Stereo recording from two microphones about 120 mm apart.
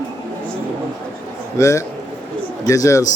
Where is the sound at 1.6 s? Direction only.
25° left (ahead or behind).